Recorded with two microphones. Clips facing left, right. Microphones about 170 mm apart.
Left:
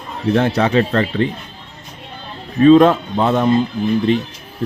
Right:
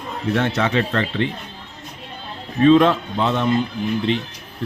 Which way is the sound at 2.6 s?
40° left (ahead or behind).